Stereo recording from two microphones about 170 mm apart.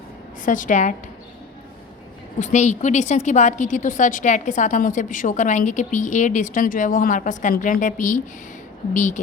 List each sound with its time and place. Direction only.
0.4 s a woman's voice: 50° left (ahead or behind)
2.4 s a woman's voice: 45° left (ahead or behind)